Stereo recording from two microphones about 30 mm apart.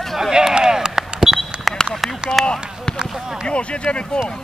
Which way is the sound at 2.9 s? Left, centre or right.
Left.